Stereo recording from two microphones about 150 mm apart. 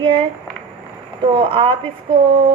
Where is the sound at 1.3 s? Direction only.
35° right (ahead or behind).